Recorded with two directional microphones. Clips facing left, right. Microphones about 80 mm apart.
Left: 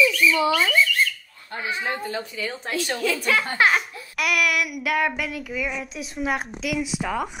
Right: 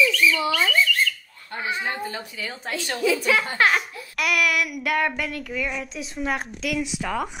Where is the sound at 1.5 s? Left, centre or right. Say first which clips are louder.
Even; centre.